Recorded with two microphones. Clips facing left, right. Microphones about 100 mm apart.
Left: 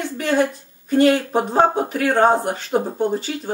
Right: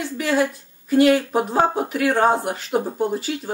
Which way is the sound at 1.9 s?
35° left (ahead or behind).